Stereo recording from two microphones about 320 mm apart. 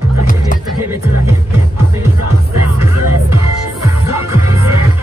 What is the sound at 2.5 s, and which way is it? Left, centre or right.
Music, right.